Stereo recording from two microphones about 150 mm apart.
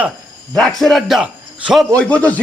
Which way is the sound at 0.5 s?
5° left (ahead or behind).